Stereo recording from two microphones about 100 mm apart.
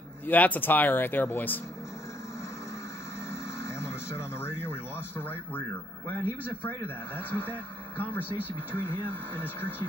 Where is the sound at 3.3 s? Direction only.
25° left (ahead or behind).